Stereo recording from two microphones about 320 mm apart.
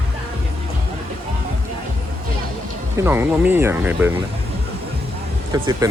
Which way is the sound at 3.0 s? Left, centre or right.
Centre.